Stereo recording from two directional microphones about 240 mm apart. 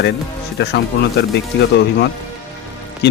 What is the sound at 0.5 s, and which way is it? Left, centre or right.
Speech, left.